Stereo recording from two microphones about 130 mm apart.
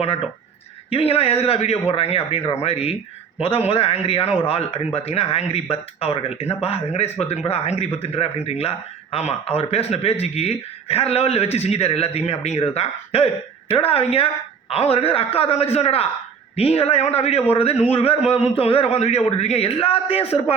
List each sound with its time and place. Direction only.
0.9 s a man's voice: 50° left (ahead or behind)